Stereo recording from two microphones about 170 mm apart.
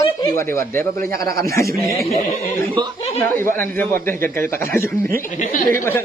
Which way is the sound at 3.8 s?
15° left (ahead or behind).